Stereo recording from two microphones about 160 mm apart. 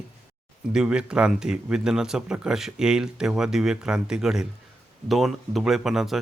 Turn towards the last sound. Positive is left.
turn(degrees=0)  # may be behind; listen again after turning